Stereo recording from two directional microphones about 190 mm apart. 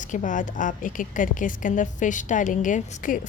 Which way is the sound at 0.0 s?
40° left (ahead or behind).